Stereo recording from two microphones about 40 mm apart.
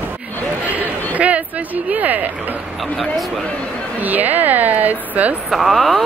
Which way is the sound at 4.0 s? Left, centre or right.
Right.